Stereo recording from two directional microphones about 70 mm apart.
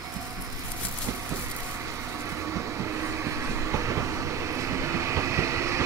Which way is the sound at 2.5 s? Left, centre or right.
Right.